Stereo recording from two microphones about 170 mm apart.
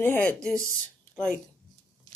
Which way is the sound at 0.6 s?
15° right (ahead or behind).